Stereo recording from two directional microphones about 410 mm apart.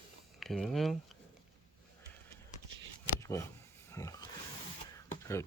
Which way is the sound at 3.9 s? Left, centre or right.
Centre.